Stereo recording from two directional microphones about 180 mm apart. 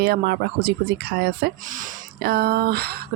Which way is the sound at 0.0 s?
60° right (ahead or behind).